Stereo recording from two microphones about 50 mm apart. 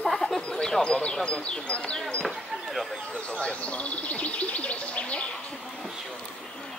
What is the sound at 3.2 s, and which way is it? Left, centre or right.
Speech, left.